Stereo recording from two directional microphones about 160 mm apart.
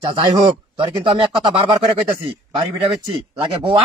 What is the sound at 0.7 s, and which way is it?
Speech, 30° right (ahead or behind).